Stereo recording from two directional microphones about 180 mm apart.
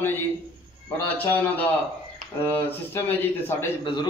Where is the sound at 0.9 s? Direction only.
10° left (ahead or behind).